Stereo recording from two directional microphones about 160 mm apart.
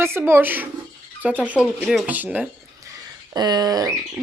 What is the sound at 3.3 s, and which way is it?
Speech, 25° right (ahead or behind).